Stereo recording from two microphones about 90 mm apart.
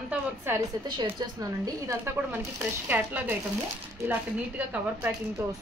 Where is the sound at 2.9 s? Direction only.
20° right (ahead or behind).